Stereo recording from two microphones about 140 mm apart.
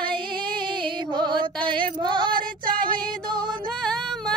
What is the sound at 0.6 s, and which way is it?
Music, 35° right (ahead or behind).